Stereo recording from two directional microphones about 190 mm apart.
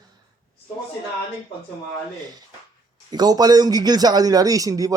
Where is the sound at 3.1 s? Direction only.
20° right (ahead or behind).